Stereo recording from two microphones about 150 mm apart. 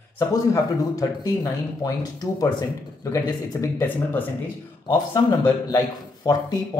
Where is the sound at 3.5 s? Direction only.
20° left (ahead or behind).